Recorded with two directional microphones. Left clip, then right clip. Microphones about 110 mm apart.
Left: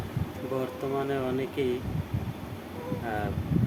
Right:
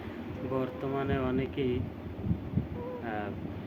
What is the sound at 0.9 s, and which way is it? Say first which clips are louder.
Speech: left 2 dB; 20° left (ahead or behind).